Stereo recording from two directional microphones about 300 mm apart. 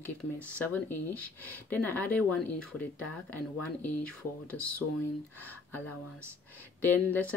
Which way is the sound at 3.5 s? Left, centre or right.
Left.